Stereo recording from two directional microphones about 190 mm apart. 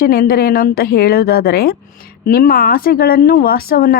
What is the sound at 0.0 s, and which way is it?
Speech, 50° left (ahead or behind).